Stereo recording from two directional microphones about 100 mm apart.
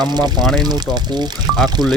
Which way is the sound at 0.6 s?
45° right (ahead or behind).